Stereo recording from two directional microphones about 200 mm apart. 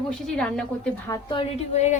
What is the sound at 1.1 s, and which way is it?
Speech, 20° left (ahead or behind).